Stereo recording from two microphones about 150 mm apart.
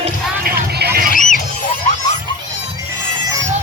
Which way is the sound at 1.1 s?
60° left (ahead or behind).